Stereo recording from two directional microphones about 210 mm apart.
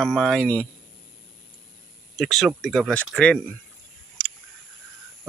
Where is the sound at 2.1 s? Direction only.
Centre (ahead or behind).